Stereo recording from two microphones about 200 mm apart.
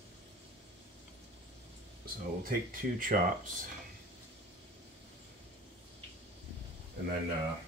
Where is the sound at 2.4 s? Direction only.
45° right (ahead or behind).